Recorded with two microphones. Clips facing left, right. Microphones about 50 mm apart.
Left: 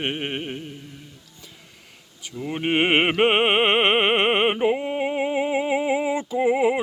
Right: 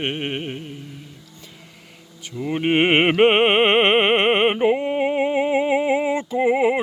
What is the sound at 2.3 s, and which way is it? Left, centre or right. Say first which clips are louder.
Music: right 3 dB; centre.